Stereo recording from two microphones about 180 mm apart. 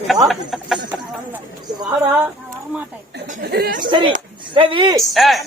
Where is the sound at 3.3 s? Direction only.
60° right (ahead or behind).